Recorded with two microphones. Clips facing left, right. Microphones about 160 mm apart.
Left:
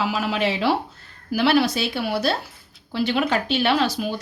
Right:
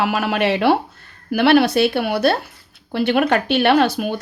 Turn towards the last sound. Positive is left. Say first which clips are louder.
# right 5 dB
turn(degrees=-60)  # may be behind; listen again after turning